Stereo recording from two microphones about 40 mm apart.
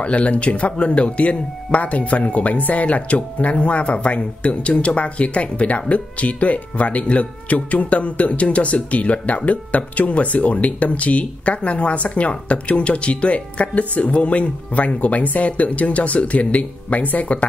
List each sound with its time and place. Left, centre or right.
0.0 s speech: left